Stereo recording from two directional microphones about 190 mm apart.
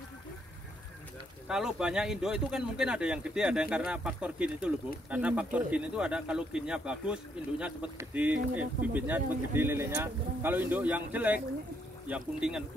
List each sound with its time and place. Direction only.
1.5 s speech: 5° right (ahead or behind)